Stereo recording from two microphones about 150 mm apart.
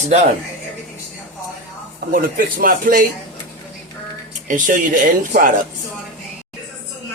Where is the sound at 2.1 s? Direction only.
70° right (ahead or behind).